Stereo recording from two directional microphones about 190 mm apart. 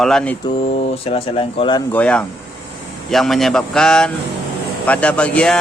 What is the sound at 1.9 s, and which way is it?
Speech, 5° left (ahead or behind).